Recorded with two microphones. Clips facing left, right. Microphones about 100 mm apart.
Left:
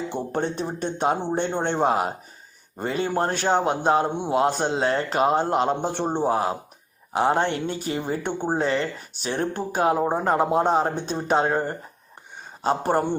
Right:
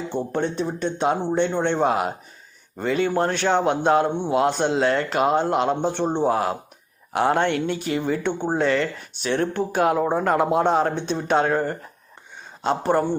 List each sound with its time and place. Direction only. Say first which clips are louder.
0.3 s speech: right 1 dB; 45° left (ahead or behind)
6.2 s speech: right 1 dB; 30° left (ahead or behind)
11.4 s speech: right 2 dB; 25° left (ahead or behind)
12.6 s speech: right 1 dB; 40° left (ahead or behind)